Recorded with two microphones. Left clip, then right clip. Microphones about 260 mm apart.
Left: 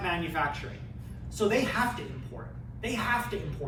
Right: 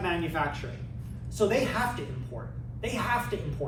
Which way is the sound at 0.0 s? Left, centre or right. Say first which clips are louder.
Even; centre.